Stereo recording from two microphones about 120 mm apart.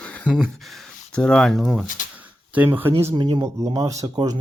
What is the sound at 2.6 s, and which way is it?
Speech, 15° right (ahead or behind).